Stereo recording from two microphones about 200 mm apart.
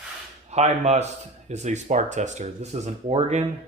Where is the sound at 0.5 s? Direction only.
35° right (ahead or behind).